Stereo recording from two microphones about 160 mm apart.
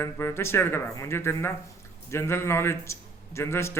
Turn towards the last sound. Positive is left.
turn(degrees=15)  # may be behind; listen again after turning